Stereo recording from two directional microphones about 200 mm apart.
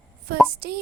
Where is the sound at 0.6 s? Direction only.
50° right (ahead or behind).